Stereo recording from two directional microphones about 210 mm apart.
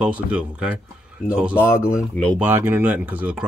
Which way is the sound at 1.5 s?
10° left (ahead or behind).